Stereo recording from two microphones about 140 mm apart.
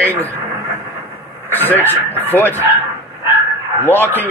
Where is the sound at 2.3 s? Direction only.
15° left (ahead or behind).